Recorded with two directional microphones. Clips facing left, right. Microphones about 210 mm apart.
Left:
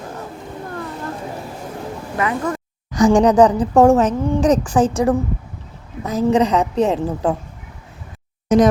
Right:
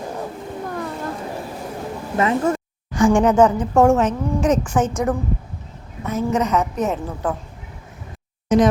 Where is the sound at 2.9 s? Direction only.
40° left (ahead or behind).